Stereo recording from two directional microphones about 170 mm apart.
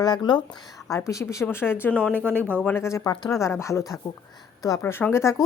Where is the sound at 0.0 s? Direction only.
25° left (ahead or behind).